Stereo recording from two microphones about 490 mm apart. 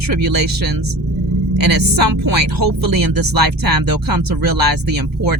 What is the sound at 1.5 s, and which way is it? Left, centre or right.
Speech, right.